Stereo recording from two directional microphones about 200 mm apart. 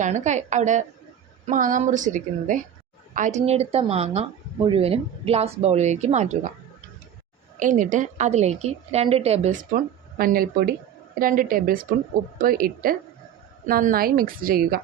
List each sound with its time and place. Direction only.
0.0 s speech: 35° right (ahead or behind)
7.6 s a woman's voice: 40° right (ahead or behind)